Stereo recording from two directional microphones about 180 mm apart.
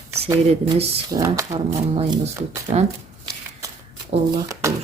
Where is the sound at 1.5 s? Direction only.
30° right (ahead or behind).